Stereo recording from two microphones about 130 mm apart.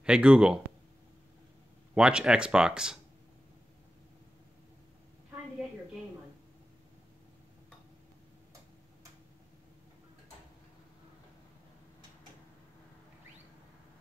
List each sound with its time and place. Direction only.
0.0 s speech: 5° right (ahead or behind)
2.0 s speech: 5° right (ahead or behind)